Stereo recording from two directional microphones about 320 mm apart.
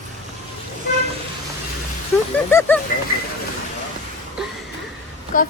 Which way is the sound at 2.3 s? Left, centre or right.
Centre.